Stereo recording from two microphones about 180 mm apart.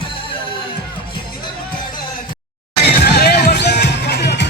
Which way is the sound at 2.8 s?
60° left (ahead or behind).